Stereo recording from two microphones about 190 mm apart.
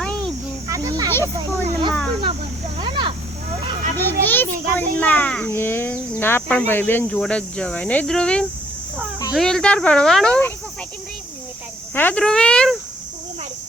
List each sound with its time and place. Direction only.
0.0 s insect: 5° left (ahead or behind)
0.7 s a sound: 20° right (ahead or behind)
1.1 s a child's voice: 10° left (ahead or behind)
2.8 s a sound: 25° right (ahead or behind)
3.9 s a child's voice: 10° left (ahead or behind)
11.9 s speech: 5° left (ahead or behind)